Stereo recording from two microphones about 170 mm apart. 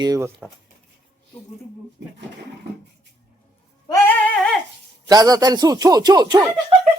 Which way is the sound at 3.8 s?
20° left (ahead or behind).